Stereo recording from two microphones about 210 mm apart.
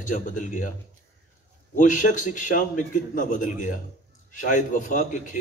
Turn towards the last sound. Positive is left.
turn(degrees=40)  # may be behind; listen again after turning